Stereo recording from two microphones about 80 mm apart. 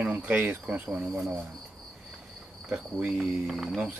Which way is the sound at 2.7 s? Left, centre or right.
Centre.